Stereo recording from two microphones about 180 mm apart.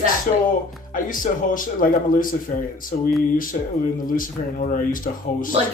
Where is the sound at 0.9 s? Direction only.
50° left (ahead or behind).